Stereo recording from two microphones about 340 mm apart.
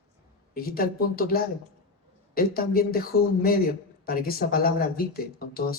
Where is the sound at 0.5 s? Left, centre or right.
Left.